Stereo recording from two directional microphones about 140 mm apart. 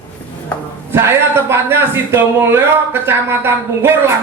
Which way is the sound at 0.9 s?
20° right (ahead or behind).